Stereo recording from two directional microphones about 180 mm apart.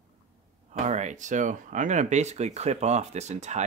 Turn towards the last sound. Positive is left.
turn(degrees=-40)  # may be behind; listen again after turning